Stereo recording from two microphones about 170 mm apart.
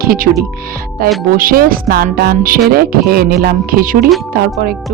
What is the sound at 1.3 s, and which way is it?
Speech, 55° right (ahead or behind).